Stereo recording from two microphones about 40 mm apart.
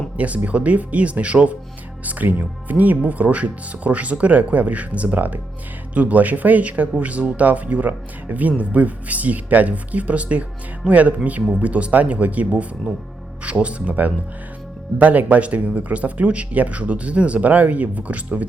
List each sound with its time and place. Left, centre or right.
0.2 s speech: right
2.0 s speech: right
14.9 s speech: right